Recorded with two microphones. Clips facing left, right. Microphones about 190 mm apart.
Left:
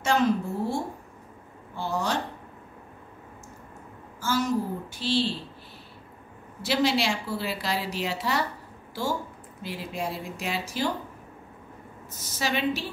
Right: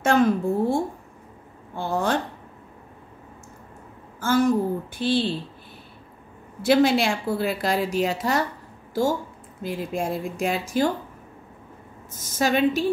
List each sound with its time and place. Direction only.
0.0 s a woman's voice: 55° right (ahead or behind)
4.2 s a woman's voice: 55° right (ahead or behind)
6.6 s a woman's voice: 50° right (ahead or behind)
9.6 s a woman's voice: 50° right (ahead or behind)
12.1 s a woman's voice: 50° right (ahead or behind)